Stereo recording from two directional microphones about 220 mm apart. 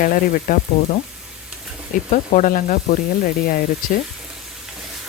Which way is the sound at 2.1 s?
35° left (ahead or behind).